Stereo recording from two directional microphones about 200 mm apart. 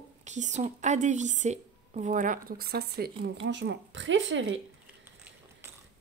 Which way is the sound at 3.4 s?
60° right (ahead or behind).